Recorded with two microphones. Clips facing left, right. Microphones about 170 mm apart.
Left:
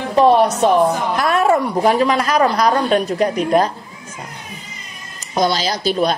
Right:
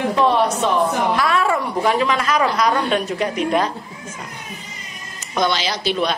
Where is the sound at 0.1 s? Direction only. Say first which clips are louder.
Left 8 dB; 40° left (ahead or behind).